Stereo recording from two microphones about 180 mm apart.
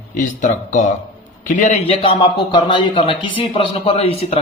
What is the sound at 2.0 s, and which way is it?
A man's voice, 30° left (ahead or behind).